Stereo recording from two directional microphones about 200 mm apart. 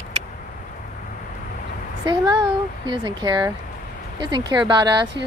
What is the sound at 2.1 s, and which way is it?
Speech, 20° right (ahead or behind).